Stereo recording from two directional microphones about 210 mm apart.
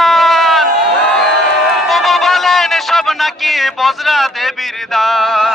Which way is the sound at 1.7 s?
Centre (ahead or behind).